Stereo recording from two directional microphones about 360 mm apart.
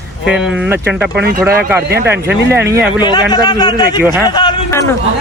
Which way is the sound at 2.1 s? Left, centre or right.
Right.